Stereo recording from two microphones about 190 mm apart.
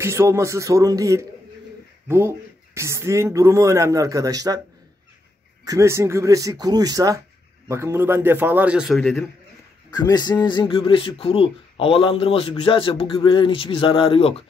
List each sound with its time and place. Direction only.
0.0 s speech: 15° right (ahead or behind)
5.7 s speech: 15° right (ahead or behind); by 9.2 s centre (ahead or behind)
9.9 s a man's voice: 20° left (ahead or behind)